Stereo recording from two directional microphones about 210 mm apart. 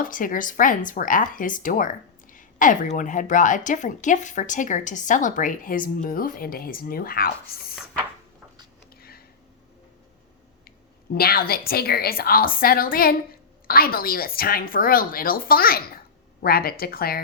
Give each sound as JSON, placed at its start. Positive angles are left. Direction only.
{"t": 0.0, "sound": "speech", "side_deg": 40}
{"t": 9.0, "sound": "a sound", "side_deg": 45}
{"t": 11.1, "sound": "a woman's voice", "side_deg": 45}